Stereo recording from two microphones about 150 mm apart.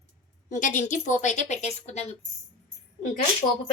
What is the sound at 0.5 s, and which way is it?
A woman's voice, 55° left (ahead or behind).